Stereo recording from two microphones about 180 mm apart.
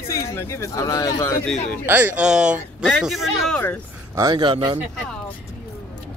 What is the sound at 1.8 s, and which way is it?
Speech, 10° right (ahead or behind).